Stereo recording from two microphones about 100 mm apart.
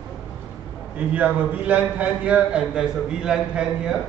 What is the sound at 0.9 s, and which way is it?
A man's voice, 15° right (ahead or behind).